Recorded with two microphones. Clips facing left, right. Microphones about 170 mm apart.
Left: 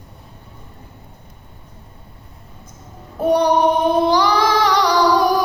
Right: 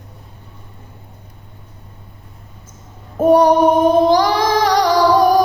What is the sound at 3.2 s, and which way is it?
Female singing, 45° right (ahead or behind).